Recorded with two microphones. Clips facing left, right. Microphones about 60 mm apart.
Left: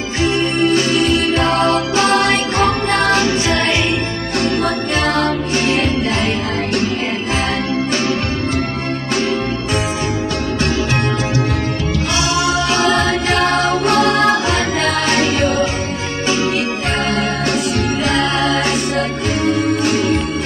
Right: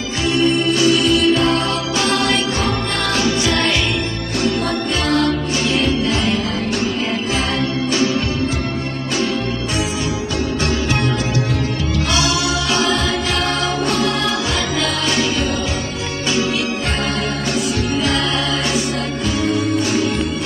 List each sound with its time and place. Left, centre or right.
0.2 s music: left
12.1 s music: left
13.8 s music: left
18.0 s music: left